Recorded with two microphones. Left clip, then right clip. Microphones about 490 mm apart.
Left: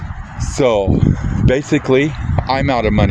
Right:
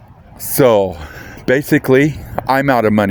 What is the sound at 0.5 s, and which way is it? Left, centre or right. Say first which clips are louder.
Speech: right 3 dB; right.